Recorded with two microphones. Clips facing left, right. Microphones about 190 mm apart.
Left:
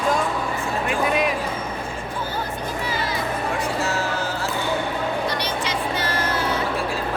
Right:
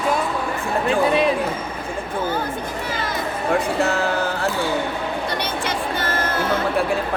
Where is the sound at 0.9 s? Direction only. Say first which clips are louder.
Right 5 dB; 30° right (ahead or behind).